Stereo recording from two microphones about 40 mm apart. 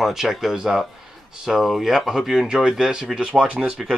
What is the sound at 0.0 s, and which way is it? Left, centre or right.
Speech, centre.